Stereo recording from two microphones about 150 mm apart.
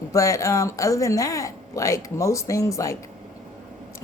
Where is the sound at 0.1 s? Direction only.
20° left (ahead or behind).